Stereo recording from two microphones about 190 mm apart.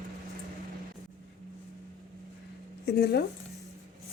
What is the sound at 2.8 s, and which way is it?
Speech, 60° left (ahead or behind).